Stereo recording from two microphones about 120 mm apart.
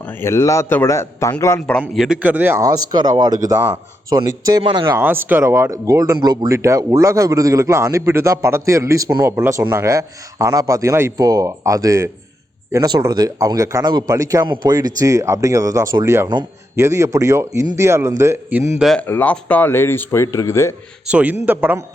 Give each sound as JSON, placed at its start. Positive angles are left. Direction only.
{"t": 0.0, "sound": "speech", "side_deg": 20}
{"t": 1.9, "sound": "speech", "side_deg": 0}
{"t": 2.2, "sound": "a man's voice", "side_deg": -15}
{"t": 2.6, "sound": "speech", "side_deg": -35}
{"t": 4.6, "sound": "speech", "side_deg": -45}
{"t": 4.9, "sound": "speech", "side_deg": -15}
{"t": 14.4, "sound": "speech", "side_deg": -40}
{"t": 18.9, "sound": "speech", "side_deg": 15}
{"t": 21.1, "sound": "a man's voice", "side_deg": -10}